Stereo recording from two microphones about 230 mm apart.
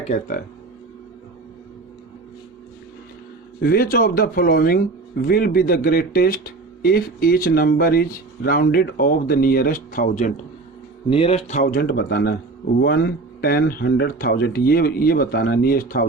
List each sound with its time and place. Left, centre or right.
0.0 s speech: left
3.6 s speech: left
11.1 s speech: left
13.4 s speech: left